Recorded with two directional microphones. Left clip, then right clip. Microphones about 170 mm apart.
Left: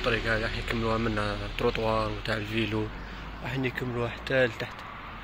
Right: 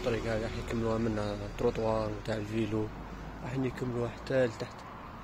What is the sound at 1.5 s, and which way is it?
Speech, centre (ahead or behind).